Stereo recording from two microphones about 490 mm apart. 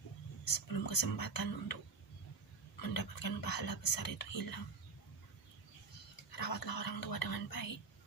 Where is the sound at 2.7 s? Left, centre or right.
Left.